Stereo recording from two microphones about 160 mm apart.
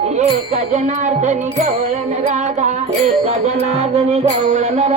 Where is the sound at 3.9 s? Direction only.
40° right (ahead or behind).